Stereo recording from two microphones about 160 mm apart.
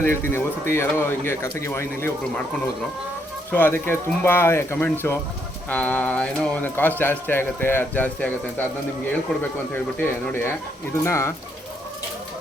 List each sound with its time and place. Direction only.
0.0 s speech: 15° left (ahead or behind)
3.5 s speech: 10° left (ahead or behind)